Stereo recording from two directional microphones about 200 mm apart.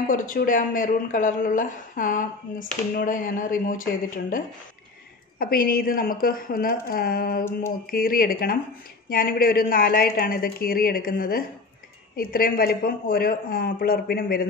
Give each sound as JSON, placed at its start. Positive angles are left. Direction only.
{"t": 0.1, "sound": "a woman's voice", "side_deg": 40}
{"t": 5.4, "sound": "a woman's voice", "side_deg": 45}